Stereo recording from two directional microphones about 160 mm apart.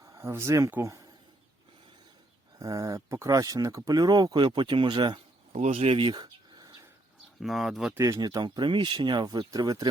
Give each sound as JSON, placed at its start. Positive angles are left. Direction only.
{"t": 0.1, "sound": "speech", "side_deg": -15}
{"t": 2.6, "sound": "speech", "side_deg": -20}
{"t": 5.5, "sound": "speech", "side_deg": -45}
{"t": 7.4, "sound": "speech", "side_deg": 0}
{"t": 7.9, "sound": "speech", "side_deg": -20}